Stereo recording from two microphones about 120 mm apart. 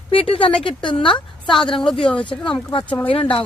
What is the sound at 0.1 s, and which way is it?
Speech, 50° left (ahead or behind).